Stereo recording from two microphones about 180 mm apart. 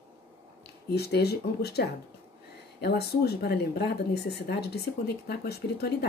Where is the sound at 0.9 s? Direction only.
65° left (ahead or behind).